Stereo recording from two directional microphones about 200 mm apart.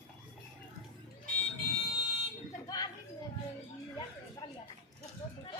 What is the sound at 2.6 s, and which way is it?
Chatter, 20° left (ahead or behind).